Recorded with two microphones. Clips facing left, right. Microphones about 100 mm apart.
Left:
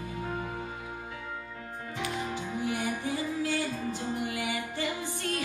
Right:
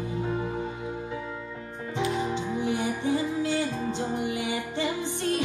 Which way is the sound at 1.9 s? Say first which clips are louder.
Right 7 dB; 25° right (ahead or behind).